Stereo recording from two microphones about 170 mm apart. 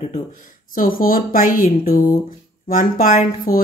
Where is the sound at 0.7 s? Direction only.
55° left (ahead or behind).